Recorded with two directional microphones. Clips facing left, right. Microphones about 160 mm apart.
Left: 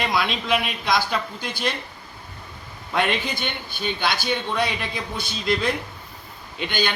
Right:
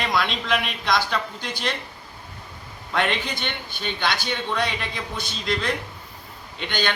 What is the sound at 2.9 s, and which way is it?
A man's voice, 10° left (ahead or behind).